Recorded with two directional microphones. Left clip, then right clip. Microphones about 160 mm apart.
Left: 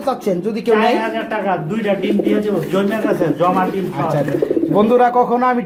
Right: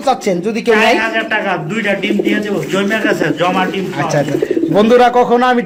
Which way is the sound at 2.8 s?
20° left (ahead or behind).